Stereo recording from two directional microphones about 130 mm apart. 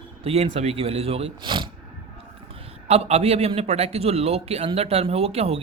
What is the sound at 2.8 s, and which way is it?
Speech, 55° right (ahead or behind).